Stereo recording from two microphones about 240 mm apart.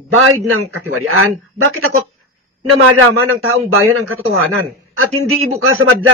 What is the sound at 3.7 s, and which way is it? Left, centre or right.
A man's voice, right.